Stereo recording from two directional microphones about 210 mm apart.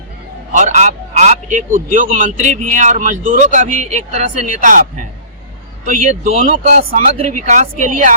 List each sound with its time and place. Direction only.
0.5 s a man's voice: 35° right (ahead or behind)